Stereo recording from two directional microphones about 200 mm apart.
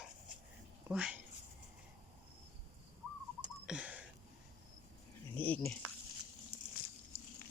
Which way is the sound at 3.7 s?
5° right (ahead or behind).